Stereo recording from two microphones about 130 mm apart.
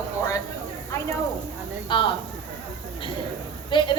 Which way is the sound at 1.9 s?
35° left (ahead or behind).